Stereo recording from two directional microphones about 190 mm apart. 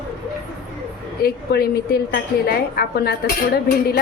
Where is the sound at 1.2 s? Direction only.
55° left (ahead or behind).